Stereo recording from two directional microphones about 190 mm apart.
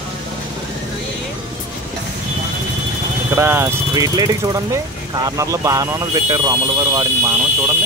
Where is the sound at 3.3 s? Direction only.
10° right (ahead or behind).